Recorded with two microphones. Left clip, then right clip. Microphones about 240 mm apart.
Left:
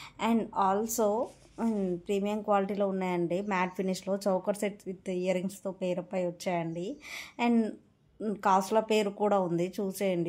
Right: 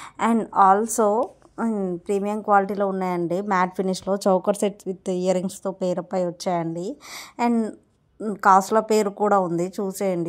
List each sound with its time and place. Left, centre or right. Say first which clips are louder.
0.0 s speech: right 8 dB; right